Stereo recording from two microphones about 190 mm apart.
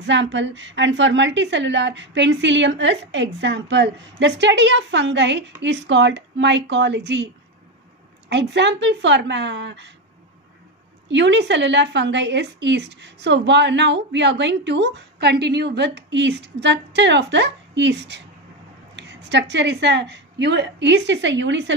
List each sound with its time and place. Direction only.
0.0 s a woman's voice: 70° right (ahead or behind)
8.3 s a woman's voice: 65° right (ahead or behind)
11.1 s a woman's voice: 70° right (ahead or behind)